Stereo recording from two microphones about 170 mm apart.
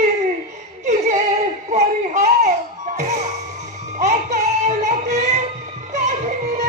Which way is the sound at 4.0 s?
45° right (ahead or behind).